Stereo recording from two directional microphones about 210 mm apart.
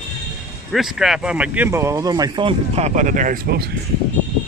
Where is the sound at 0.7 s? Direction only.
Centre (ahead or behind); by 3.6 s 40° right (ahead or behind).